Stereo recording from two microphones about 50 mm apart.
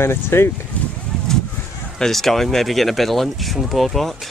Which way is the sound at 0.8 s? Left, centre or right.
Left.